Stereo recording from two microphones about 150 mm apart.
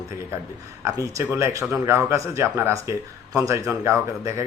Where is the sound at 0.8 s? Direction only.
20° right (ahead or behind).